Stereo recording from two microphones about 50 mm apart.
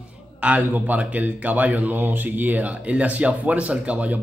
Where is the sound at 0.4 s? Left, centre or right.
Right.